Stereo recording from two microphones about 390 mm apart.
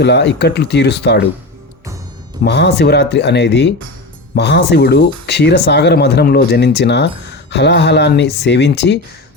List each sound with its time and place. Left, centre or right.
0.0 s speech: left
2.4 s speech: left